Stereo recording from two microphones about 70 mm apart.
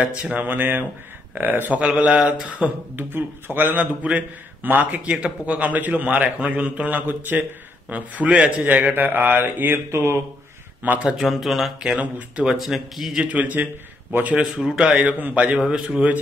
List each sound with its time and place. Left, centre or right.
0.0 s a man's voice: centre
3.1 s a man's voice: right
10.8 s a man's voice: right
11.1 s a man's voice: centre
11.8 s speech: centre
12.5 s a man's voice: centre
13.2 s a man's voice: right
14.9 s a man's voice: centre
15.6 s a man's voice: centre